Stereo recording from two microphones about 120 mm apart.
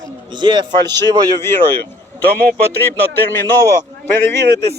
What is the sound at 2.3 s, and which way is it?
A man's voice, 15° left (ahead or behind).